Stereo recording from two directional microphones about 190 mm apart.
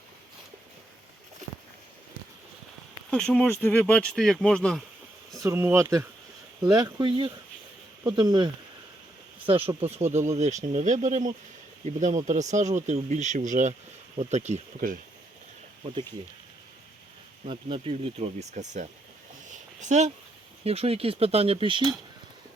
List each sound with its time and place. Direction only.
3.1 s speech: 5° left (ahead or behind)
5.4 s speech: 15° right (ahead or behind); by 14.9 s 40° right (ahead or behind)
17.4 s speech: 30° right (ahead or behind)
19.5 s a sound: 40° right (ahead or behind)
20.7 s speech: 30° right (ahead or behind)